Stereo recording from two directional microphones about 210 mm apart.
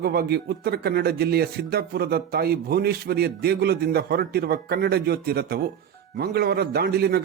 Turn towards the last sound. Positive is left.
turn(degrees=-50)  # may be behind; listen again after turning